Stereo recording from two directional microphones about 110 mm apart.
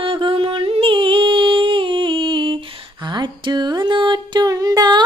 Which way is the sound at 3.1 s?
40° right (ahead or behind).